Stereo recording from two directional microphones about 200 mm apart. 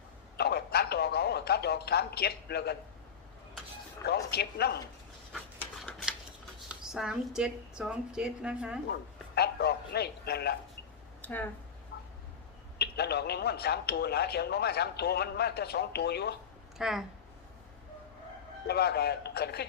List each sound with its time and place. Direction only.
0.3 s a sound: 55° left (ahead or behind)
4.0 s a man's voice: 55° left (ahead or behind)
5.3 s a sound: centre (ahead or behind)
6.7 s a woman's voice: centre (ahead or behind)
8.9 s a man's voice: 55° left (ahead or behind)
11.2 s a sound: 10° left (ahead or behind)
12.8 s a man's voice: 55° left (ahead or behind)
16.7 s speech: centre (ahead or behind)
18.7 s a man's voice: 55° left (ahead or behind)